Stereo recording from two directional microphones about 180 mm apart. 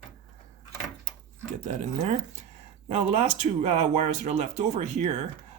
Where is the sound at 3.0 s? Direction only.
40° right (ahead or behind).